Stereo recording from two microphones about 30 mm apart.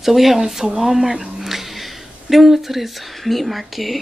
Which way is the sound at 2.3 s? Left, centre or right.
Centre.